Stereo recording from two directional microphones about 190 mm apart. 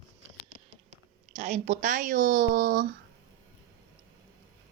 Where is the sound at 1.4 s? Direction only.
35° right (ahead or behind); by 2.8 s 50° right (ahead or behind).